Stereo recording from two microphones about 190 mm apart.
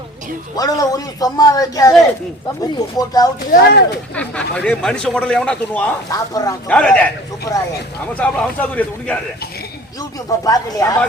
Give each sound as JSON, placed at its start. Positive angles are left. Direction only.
{"t": 0.5, "sound": "speech", "side_deg": 20}
{"t": 3.5, "sound": "speech", "side_deg": 60}
{"t": 4.1, "sound": "a man's voice", "side_deg": 5}
{"t": 6.1, "sound": "speech", "side_deg": 20}
{"t": 6.7, "sound": "speech", "side_deg": 5}
{"t": 10.4, "sound": "speech", "side_deg": 20}